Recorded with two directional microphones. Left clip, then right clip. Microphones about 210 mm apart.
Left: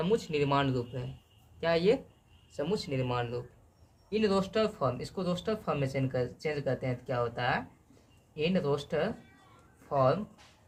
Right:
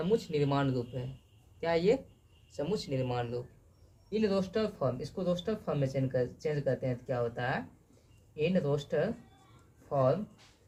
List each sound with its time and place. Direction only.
0.0 s speech: 20° left (ahead or behind)